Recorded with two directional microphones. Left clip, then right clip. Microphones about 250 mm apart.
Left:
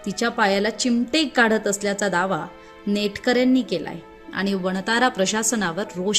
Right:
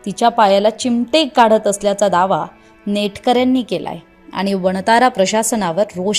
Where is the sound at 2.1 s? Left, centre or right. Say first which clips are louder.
Right 6 dB; centre.